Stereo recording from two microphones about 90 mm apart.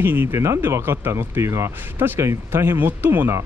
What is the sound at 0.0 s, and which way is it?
Speech, 25° right (ahead or behind).